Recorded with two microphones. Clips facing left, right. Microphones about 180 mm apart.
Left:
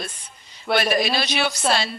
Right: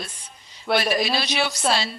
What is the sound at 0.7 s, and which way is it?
Speech, centre (ahead or behind).